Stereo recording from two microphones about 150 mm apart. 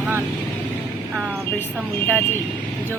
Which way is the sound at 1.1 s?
15° right (ahead or behind).